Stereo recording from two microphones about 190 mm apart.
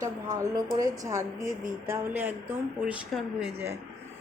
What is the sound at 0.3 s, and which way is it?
Speech, 20° right (ahead or behind).